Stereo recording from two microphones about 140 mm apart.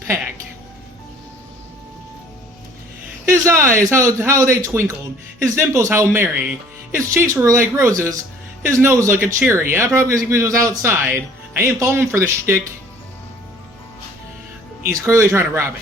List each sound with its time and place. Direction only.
3.2 s a man's voice: 20° right (ahead or behind)
15.0 s speech: 20° right (ahead or behind)